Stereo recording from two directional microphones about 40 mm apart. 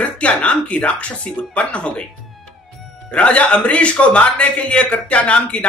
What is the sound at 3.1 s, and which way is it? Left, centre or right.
Speech, left.